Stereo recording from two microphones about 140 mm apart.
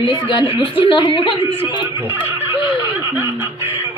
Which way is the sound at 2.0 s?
15° right (ahead or behind).